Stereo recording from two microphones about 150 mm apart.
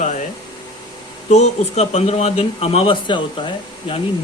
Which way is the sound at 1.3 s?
50° left (ahead or behind).